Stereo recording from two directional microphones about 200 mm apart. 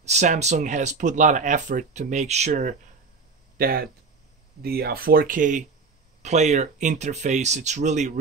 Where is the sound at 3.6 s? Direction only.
50° right (ahead or behind).